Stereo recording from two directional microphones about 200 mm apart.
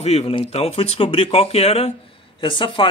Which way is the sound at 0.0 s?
30° left (ahead or behind).